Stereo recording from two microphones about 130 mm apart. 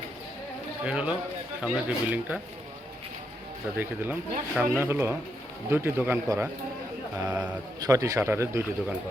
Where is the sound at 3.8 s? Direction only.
15° right (ahead or behind).